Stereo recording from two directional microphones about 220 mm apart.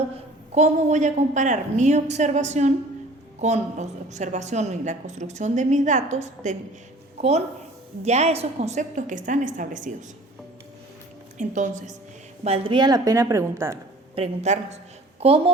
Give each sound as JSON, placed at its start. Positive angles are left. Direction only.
{"t": 0.5, "sound": "a woman's voice", "side_deg": -30}
{"t": 11.3, "sound": "a woman's voice", "side_deg": -35}
{"t": 14.2, "sound": "a woman's voice", "side_deg": -30}